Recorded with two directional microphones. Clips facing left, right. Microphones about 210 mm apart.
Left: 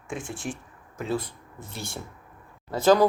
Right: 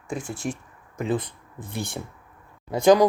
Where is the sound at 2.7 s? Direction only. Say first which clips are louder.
Right 2 dB; 15° right (ahead or behind).